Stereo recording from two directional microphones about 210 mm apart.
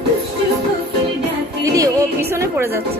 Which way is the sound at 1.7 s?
15° right (ahead or behind).